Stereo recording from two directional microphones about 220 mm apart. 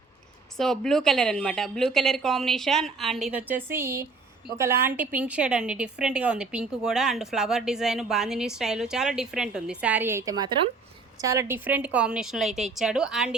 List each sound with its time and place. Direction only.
0.5 s a woman's voice: centre (ahead or behind)